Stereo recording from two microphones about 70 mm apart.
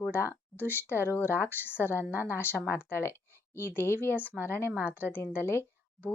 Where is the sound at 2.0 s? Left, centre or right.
Right.